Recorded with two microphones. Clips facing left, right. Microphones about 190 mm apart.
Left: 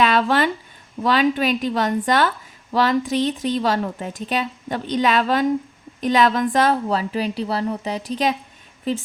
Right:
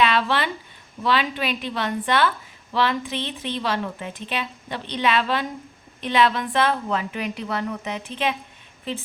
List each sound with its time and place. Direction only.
0.0 s a woman's voice: 45° left (ahead or behind)